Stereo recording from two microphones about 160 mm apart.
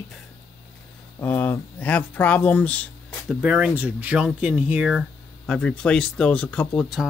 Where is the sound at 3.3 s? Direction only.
5° right (ahead or behind).